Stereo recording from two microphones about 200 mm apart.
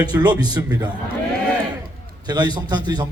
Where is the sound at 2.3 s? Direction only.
20° right (ahead or behind).